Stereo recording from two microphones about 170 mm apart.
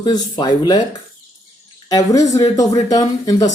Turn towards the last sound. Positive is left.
turn(degrees=20)  # may be behind; listen again after turning